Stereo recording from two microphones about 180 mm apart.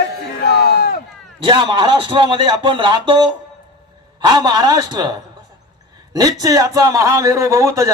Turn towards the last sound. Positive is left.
turn(degrees=-15)  # may be behind; listen again after turning